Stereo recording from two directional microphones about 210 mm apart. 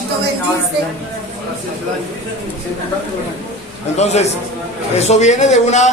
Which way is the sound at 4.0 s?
30° left (ahead or behind).